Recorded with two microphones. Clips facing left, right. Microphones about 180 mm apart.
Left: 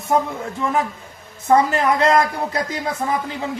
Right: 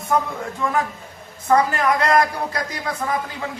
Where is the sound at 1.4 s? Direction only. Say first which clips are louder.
Left 2 dB; 25° left (ahead or behind).